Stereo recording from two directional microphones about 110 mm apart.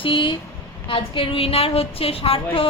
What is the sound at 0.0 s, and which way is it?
Speech, 50° left (ahead or behind).